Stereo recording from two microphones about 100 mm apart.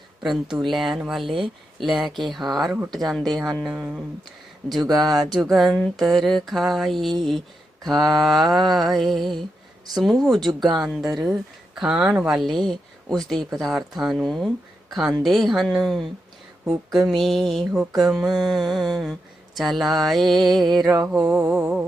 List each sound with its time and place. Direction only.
0.2 s speech: 5° right (ahead or behind)
3.7 s speech: 10° right (ahead or behind)
4.7 s speech: centre (ahead or behind)
12.4 s speech: centre (ahead or behind)
21.1 s speech: 20° right (ahead or behind)